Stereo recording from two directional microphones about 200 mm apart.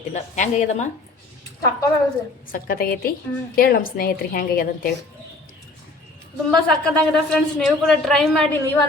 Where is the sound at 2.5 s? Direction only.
45° left (ahead or behind).